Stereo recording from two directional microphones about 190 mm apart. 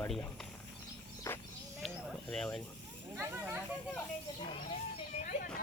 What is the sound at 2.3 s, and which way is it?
Speech, 5° left (ahead or behind).